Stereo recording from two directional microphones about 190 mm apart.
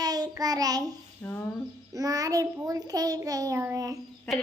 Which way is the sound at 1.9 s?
20° right (ahead or behind).